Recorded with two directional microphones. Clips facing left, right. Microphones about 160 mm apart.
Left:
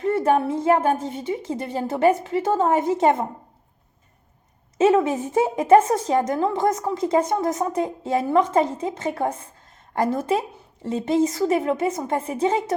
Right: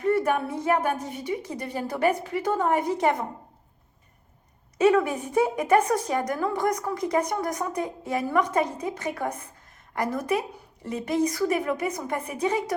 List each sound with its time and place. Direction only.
0.0 s a woman's voice: 25° left (ahead or behind)
4.8 s a woman's voice: 25° left (ahead or behind)